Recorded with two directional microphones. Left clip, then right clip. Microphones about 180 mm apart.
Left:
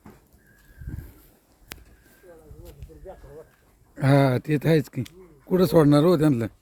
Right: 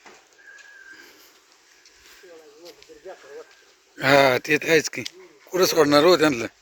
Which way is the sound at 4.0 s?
5° right (ahead or behind).